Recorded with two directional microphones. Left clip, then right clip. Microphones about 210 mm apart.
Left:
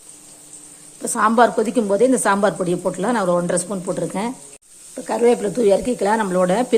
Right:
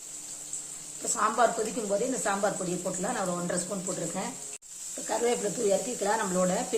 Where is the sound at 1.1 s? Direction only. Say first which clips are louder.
Left 10 dB; 45° left (ahead or behind).